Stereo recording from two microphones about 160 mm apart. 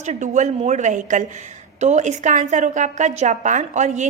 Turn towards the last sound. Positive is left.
turn(degrees=-45)  # may be behind; listen again after turning